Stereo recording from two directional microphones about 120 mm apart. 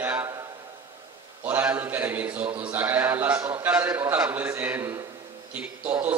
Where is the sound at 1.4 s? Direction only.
20° right (ahead or behind).